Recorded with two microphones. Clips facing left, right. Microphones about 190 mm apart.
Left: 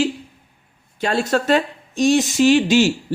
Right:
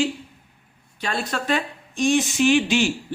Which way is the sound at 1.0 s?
45° left (ahead or behind).